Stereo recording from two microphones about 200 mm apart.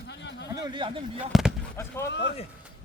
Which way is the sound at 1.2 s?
5° right (ahead or behind).